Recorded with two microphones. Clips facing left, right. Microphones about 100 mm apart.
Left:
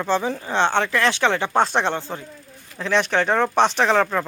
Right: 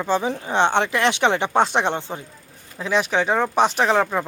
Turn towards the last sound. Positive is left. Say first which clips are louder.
# even
turn(degrees=-10)  # may be behind; listen again after turning